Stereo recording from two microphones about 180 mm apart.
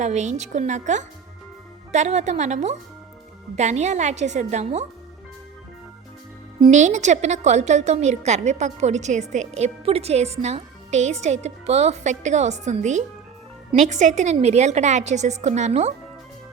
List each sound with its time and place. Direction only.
0.0 s a woman's voice: 40° right (ahead or behind)
6.7 s a woman's voice: 40° right (ahead or behind)